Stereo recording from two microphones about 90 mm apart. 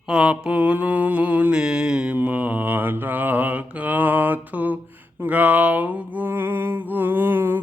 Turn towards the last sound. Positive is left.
turn(degrees=-25)  # may be behind; listen again after turning